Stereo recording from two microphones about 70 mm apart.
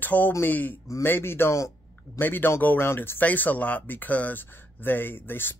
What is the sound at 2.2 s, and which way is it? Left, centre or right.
Speech, left.